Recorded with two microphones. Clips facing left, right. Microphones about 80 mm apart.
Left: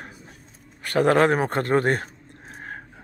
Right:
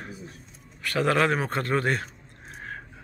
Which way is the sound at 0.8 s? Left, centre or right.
Left.